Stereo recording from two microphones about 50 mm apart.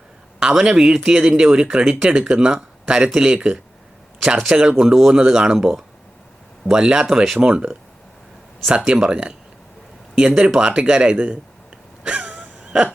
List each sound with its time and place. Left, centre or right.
0.3 s speech: centre
4.8 s speech: centre
8.9 s speech: centre
12.0 s a sound: right